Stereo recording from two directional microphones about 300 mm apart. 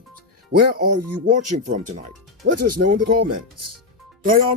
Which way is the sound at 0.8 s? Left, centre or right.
Right.